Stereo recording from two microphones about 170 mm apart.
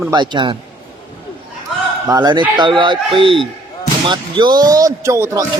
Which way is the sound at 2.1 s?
25° right (ahead or behind).